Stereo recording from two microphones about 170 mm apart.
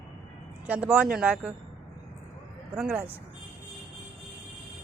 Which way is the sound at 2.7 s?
5° right (ahead or behind).